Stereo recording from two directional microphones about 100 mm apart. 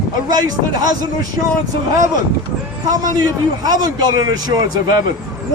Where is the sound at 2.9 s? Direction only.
40° right (ahead or behind).